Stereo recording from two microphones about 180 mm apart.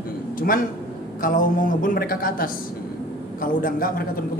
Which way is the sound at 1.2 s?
50° left (ahead or behind).